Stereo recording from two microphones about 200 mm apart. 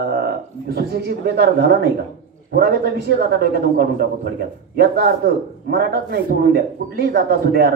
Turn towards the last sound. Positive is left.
turn(degrees=-50)  # may be behind; listen again after turning